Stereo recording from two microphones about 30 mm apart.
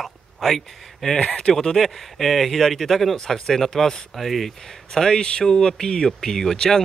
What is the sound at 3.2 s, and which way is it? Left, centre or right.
Speech, centre.